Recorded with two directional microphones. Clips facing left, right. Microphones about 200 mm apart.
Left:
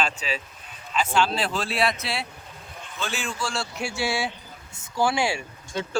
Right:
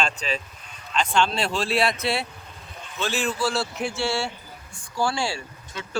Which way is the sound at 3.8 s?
15° left (ahead or behind).